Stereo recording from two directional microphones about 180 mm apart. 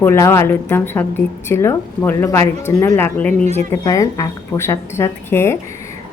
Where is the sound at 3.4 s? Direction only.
40° right (ahead or behind).